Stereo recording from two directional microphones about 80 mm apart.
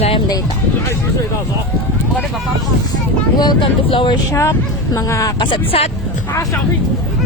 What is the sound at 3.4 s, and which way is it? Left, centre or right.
Speech, left.